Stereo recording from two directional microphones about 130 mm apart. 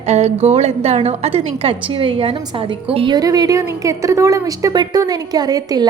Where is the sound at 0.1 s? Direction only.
55° right (ahead or behind).